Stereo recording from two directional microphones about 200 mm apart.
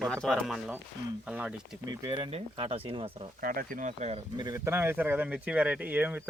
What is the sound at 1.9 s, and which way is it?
Speech, 20° right (ahead or behind).